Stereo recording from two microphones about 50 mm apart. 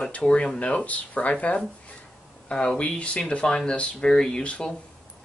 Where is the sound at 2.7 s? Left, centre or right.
Left.